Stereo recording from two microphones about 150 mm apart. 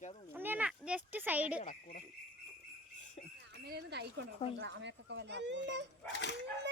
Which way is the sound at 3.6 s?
90° right.